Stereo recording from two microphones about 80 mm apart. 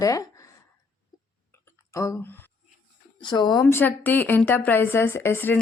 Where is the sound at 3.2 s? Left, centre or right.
Left.